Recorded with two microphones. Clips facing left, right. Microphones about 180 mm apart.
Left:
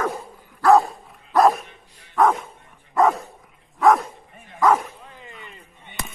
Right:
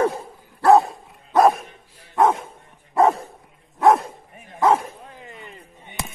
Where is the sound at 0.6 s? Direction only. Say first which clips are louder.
Right 1 dB; 25° right (ahead or behind).